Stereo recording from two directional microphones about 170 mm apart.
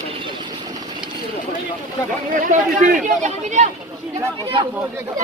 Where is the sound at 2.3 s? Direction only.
50° right (ahead or behind).